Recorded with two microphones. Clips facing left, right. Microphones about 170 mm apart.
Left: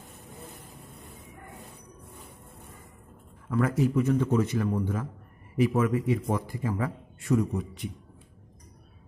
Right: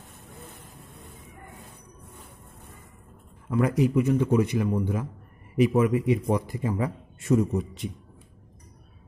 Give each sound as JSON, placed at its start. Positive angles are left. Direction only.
{"t": 3.4, "sound": "a man's voice", "side_deg": -20}